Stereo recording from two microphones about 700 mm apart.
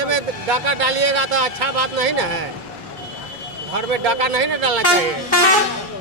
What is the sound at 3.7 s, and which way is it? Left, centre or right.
Speech, right.